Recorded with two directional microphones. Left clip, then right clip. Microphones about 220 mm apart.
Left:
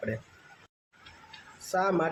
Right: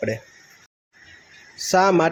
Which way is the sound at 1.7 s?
35° right (ahead or behind).